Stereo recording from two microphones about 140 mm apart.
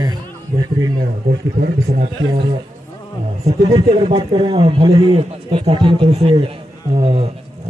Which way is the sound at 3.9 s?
40° right (ahead or behind).